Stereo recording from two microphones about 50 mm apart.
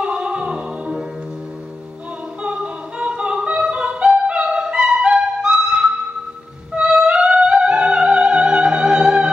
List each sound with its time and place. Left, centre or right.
0.0 s music: centre
2.4 s yodeling: right
6.7 s music: right